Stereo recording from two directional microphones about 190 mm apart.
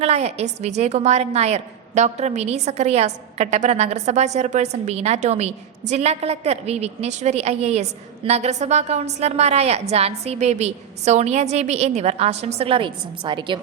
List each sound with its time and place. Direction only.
0.0 s a woman's voice: 35° right (ahead or behind)